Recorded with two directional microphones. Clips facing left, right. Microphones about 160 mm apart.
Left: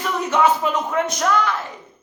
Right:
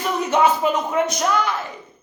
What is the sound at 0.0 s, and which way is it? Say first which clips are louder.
Speech: right 1 dB; 15° right (ahead or behind).